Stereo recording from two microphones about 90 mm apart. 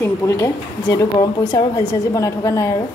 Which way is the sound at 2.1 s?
35° left (ahead or behind).